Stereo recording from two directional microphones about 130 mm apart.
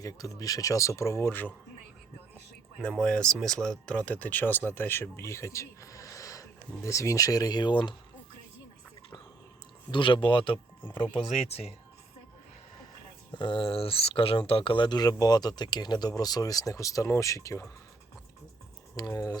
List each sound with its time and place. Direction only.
0.0 s speech: 25° left (ahead or behind)
3.0 s speech: 5° left (ahead or behind); by 7.9 s 35° left (ahead or behind)
9.9 s speech: 40° left (ahead or behind)
11.1 s speech: 50° left (ahead or behind)
13.3 s speech: 40° left (ahead or behind); by 17.7 s 25° left (ahead or behind)
18.9 s speech: 30° left (ahead or behind)